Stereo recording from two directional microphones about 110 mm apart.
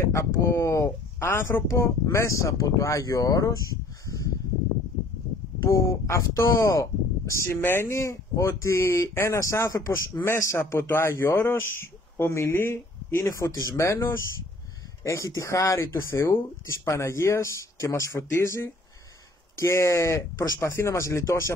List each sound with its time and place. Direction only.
0.1 s speech: 25° left (ahead or behind)
5.6 s speech: 25° left (ahead or behind)
15.0 s speech: 25° left (ahead or behind)